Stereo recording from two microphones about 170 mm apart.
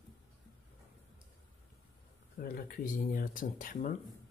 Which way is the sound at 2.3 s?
60° left (ahead or behind).